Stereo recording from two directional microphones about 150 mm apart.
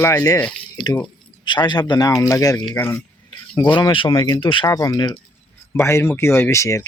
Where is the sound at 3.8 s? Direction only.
30° left (ahead or behind).